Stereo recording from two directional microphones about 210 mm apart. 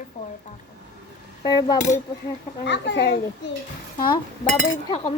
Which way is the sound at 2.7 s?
55° left (ahead or behind).